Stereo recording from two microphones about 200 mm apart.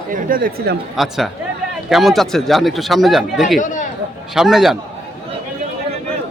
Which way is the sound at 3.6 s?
40° left (ahead or behind).